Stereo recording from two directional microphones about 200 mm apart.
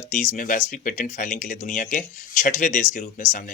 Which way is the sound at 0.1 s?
35° left (ahead or behind).